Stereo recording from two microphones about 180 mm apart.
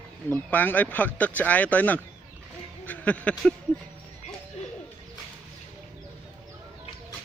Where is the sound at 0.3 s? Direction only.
10° left (ahead or behind).